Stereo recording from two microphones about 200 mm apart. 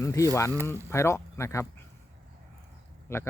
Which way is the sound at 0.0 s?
15° left (ahead or behind).